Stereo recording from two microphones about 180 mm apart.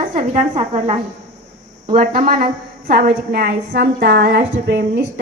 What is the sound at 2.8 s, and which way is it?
A woman's voice, 60° right (ahead or behind).